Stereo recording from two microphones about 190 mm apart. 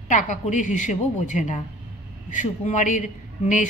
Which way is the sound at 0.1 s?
40° left (ahead or behind).